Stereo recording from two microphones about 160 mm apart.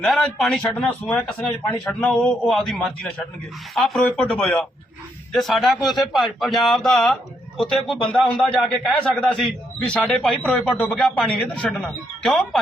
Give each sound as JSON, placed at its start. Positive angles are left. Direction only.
{"t": 0.0, "sound": "speech", "side_deg": 5}